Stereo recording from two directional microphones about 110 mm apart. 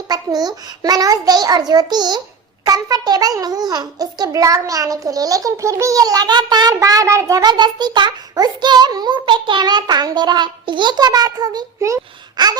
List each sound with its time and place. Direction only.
0.1 s a child's voice: 35° right (ahead or behind)
7.5 s a child's voice: 40° right (ahead or behind)